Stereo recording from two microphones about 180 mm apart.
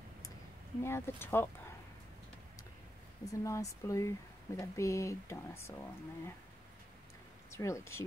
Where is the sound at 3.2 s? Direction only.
20° left (ahead or behind).